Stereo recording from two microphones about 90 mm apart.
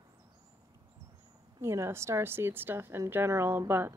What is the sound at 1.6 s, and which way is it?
A woman's voice, 30° right (ahead or behind).